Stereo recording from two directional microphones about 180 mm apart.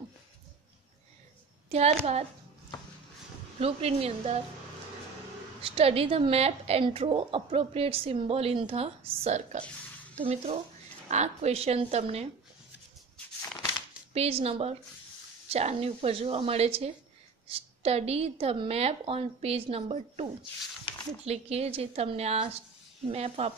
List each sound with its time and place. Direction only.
1.7 s a woman's voice: 35° right (ahead or behind)
3.5 s a woman's voice: 35° right (ahead or behind)
5.6 s a woman's voice: 30° right (ahead or behind)
14.1 s a woman's voice: 35° right (ahead or behind)
21.3 s a woman's voice: 35° right (ahead or behind)